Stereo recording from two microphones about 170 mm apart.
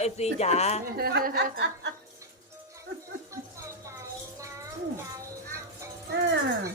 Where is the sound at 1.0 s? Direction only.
60° right (ahead or behind); by 1.9 s 80° right.